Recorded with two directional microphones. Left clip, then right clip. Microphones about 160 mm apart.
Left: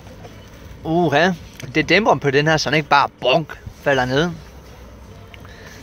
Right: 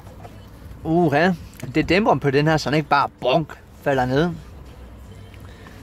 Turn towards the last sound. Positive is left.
turn(degrees=-10)  # may be behind; listen again after turning